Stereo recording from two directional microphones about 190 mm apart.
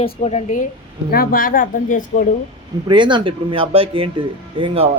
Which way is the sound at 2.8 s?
25° right (ahead or behind).